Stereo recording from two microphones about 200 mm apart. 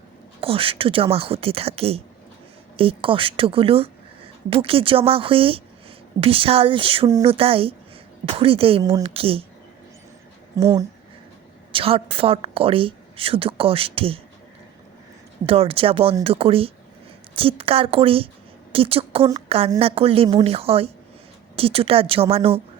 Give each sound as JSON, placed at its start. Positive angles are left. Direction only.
{"t": 0.4, "sound": "a woman's voice", "side_deg": -25}
{"t": 10.5, "sound": "speech", "side_deg": -15}
{"t": 11.7, "sound": "a woman's voice", "side_deg": -25}
{"t": 15.4, "sound": "a woman's voice", "side_deg": -30}